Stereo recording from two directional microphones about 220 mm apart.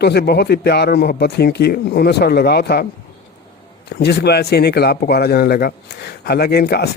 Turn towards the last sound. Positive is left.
turn(degrees=45)  # may be behind; listen again after turning